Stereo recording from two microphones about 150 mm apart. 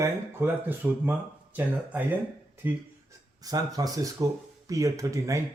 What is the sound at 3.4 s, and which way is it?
Speech, 25° right (ahead or behind).